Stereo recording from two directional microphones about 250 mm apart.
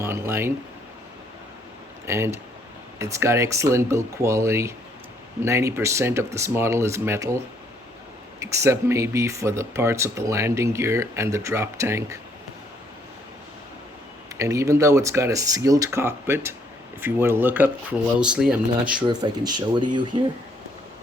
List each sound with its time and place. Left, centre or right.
0.0 s speech: centre
2.0 s speech: centre
14.3 s speech: centre
18.9 s speech: centre